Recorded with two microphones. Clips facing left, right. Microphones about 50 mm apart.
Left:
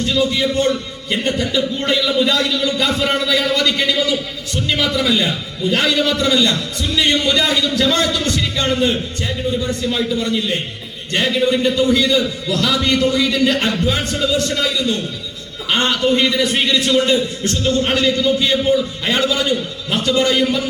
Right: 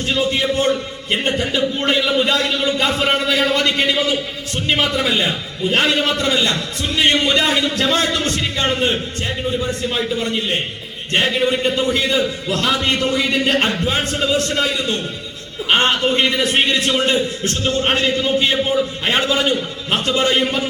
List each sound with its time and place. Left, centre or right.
0.0 s a man's voice: right